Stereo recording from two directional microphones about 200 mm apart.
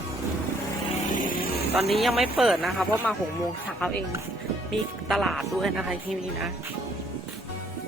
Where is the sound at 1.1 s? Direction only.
45° left (ahead or behind).